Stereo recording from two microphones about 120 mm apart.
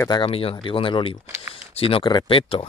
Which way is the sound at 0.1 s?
50° left (ahead or behind).